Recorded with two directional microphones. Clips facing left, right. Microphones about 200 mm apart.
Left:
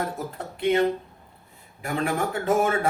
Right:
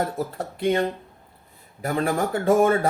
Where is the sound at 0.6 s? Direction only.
40° right (ahead or behind).